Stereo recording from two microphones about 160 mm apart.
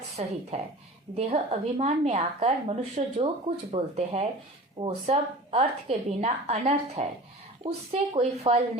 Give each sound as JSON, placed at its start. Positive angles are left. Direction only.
{"t": 0.2, "sound": "a woman's voice", "side_deg": -45}